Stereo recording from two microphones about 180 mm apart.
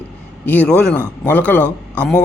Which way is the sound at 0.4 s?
5° left (ahead or behind).